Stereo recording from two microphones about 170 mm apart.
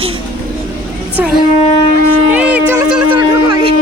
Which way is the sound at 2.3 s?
10° right (ahead or behind).